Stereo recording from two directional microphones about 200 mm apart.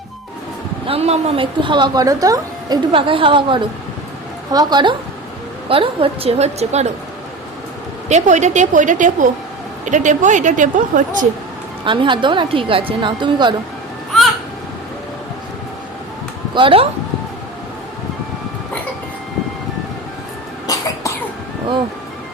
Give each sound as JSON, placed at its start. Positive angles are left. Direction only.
{"t": 0.9, "sound": "a woman's voice", "side_deg": -30}
{"t": 8.1, "sound": "a woman's voice", "side_deg": -35}
{"t": 11.9, "sound": "speech", "side_deg": -25}
{"t": 16.6, "sound": "speech", "side_deg": -25}
{"t": 20.7, "sound": "cough", "side_deg": 15}